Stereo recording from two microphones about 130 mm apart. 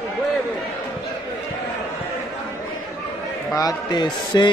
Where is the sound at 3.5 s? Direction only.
30° left (ahead or behind).